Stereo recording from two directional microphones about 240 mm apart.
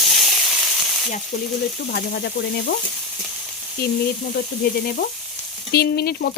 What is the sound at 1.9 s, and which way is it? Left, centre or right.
Sizzle, left.